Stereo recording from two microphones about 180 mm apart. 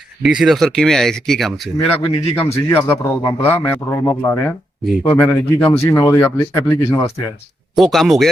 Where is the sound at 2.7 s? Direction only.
10° left (ahead or behind).